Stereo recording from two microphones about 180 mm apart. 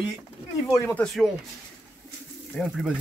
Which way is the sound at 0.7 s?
15° left (ahead or behind).